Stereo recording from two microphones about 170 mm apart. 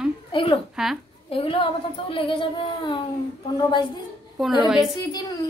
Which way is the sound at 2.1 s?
30° left (ahead or behind).